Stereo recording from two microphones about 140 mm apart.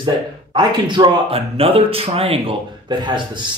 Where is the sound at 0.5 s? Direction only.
35° right (ahead or behind).